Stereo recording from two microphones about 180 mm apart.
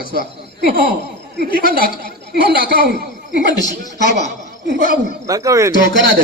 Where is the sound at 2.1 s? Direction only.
60° right (ahead or behind).